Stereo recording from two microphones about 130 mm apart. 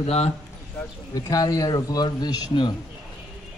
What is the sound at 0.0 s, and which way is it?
Speech, 55° left (ahead or behind).